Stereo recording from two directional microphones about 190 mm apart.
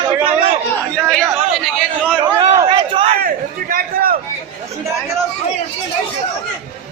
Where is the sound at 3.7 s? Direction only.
50° right (ahead or behind).